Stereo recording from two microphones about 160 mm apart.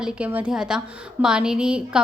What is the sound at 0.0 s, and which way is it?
A woman's voice, 10° right (ahead or behind).